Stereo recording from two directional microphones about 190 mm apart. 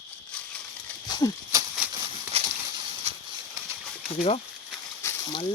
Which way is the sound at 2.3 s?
35° right (ahead or behind).